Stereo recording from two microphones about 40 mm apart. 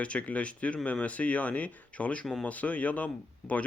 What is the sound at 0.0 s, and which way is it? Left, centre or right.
Speech, left.